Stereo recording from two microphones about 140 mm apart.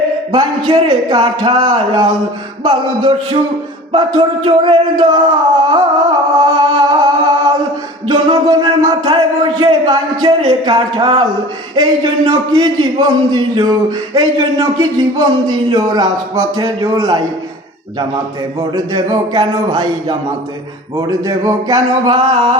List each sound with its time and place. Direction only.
0.3 s speech: 30° right (ahead or behind)
3.9 s music: 35° right (ahead or behind)
8.0 s speech: 30° right (ahead or behind)
18.9 s speech: 30° right (ahead or behind)